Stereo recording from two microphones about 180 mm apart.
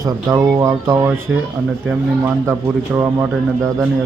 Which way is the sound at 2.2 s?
15° right (ahead or behind).